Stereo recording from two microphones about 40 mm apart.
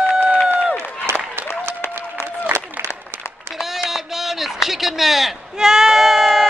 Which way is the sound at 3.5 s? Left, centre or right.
Centre.